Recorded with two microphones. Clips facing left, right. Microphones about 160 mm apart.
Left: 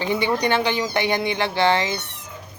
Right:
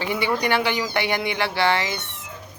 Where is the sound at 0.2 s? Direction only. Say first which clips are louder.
Right 2 dB; 20° left (ahead or behind).